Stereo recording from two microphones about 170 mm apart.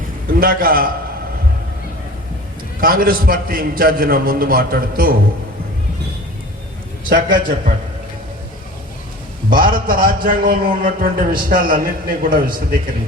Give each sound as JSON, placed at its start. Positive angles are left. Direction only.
{"t": 0.3, "sound": "a man's voice", "side_deg": -60}
{"t": 2.8, "sound": "a man's voice", "side_deg": -60}
{"t": 7.1, "sound": "a man's voice", "side_deg": -55}
{"t": 9.6, "sound": "a man's voice", "side_deg": -55}